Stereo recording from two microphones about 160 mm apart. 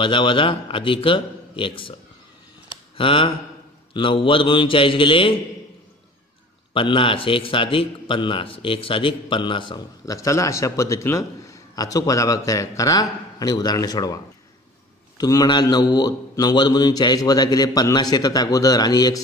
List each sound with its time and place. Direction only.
0.0 s a man's voice: 30° left (ahead or behind)
3.0 s a man's voice: 35° left (ahead or behind)
6.7 s a man's voice: 35° left (ahead or behind)